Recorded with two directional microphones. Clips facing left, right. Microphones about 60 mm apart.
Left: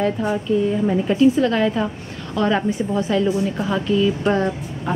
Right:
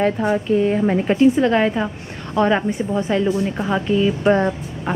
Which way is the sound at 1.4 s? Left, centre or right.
Right.